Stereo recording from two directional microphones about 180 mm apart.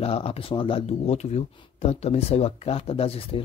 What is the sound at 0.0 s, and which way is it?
Speech, 35° left (ahead or behind).